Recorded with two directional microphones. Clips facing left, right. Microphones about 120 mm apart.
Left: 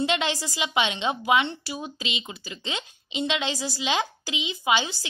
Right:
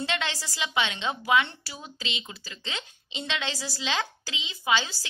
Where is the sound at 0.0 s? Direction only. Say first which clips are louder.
Left 6 dB; 20° left (ahead or behind).